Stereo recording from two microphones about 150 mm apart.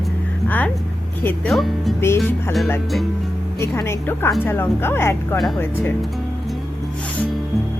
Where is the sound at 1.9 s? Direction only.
15° left (ahead or behind).